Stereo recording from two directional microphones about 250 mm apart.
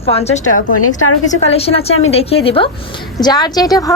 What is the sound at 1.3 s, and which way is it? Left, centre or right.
A woman's voice, left.